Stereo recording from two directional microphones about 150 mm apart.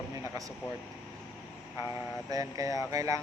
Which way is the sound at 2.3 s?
25° right (ahead or behind).